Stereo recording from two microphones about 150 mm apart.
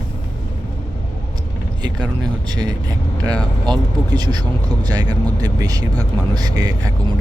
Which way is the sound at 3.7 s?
30° right (ahead or behind).